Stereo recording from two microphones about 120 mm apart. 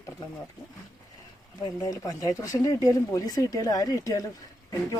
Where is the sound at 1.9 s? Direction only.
30° left (ahead or behind).